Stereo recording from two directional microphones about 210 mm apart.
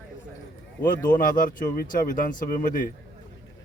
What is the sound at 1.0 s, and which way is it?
Speech, 40° left (ahead or behind).